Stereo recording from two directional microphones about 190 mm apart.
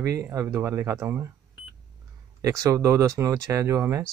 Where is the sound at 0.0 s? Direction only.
15° right (ahead or behind).